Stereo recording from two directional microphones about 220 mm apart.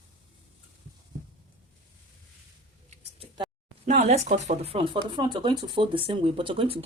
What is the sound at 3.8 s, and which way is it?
Speech, 30° right (ahead or behind).